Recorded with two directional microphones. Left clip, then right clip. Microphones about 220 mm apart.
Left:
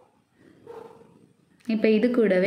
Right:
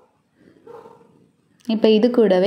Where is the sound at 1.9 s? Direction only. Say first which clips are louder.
Right 6 dB; 15° right (ahead or behind).